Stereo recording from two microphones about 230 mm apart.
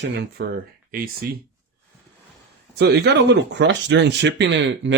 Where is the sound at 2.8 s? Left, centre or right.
Right.